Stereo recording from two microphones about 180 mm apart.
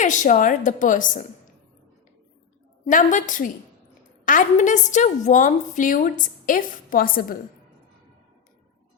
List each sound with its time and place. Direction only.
0.0 s a woman's voice: 45° left (ahead or behind)
2.9 s a woman's voice: 45° left (ahead or behind)